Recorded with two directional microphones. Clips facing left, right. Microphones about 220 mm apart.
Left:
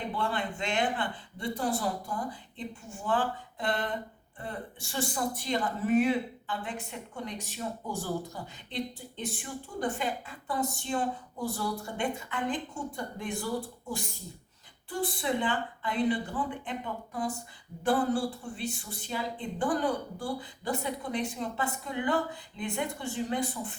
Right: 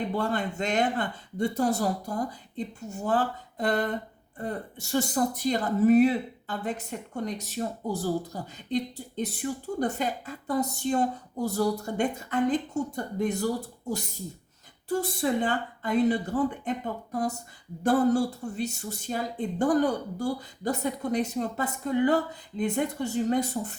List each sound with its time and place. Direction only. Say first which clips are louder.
0.1 s speech: right 4 dB; 40° right (ahead or behind)